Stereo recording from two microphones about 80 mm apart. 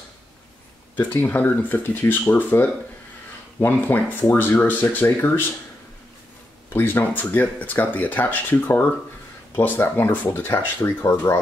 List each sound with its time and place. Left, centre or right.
0.9 s speech: left
6.7 s speech: left